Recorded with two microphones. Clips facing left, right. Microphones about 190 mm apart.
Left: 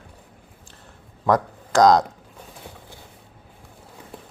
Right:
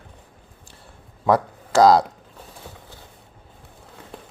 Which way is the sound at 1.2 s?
5° right (ahead or behind).